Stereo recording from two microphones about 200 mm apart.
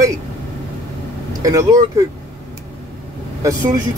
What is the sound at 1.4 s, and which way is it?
Speech, 15° right (ahead or behind).